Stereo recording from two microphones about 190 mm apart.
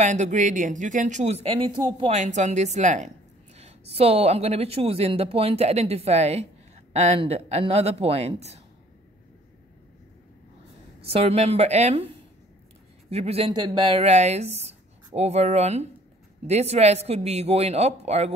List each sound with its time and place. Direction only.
0.0 s speech: 40° right (ahead or behind)
2.1 s speech: 40° right (ahead or behind)
11.1 s speech: 30° right (ahead or behind)
13.1 s speech: 30° right (ahead or behind)